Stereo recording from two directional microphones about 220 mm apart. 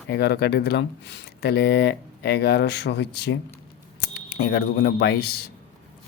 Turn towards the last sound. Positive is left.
turn(degrees=45)  # may be behind; listen again after turning